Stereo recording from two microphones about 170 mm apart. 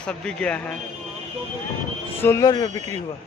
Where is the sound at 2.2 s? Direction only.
15° left (ahead or behind).